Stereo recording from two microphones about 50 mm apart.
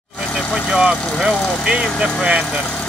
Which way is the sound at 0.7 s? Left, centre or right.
Centre.